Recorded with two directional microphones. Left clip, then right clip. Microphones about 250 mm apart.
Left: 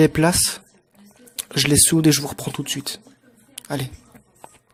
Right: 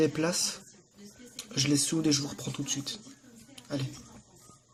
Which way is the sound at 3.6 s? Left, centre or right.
Left.